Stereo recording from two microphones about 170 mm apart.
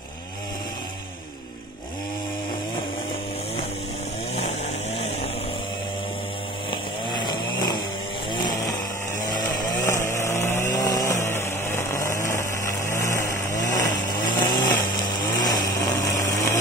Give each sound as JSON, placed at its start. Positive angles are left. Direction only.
{"t": 6.7, "sound": "chainsaw", "side_deg": 25}
{"t": 8.3, "sound": "vehicle", "side_deg": 25}
{"t": 9.8, "sound": "chainsaw", "side_deg": 15}